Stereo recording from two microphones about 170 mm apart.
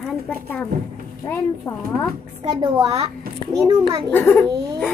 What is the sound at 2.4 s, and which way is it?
A child's voice, 30° right (ahead or behind).